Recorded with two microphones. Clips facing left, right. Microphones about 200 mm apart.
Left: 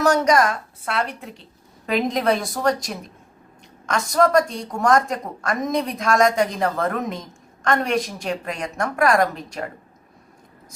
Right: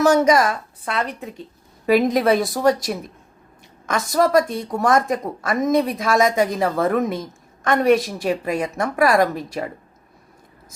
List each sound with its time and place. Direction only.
0.0 s a woman's voice: 5° right (ahead or behind)